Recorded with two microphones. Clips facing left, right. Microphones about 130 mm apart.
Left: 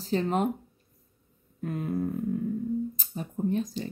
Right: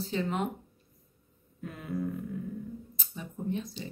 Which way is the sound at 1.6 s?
40° left (ahead or behind).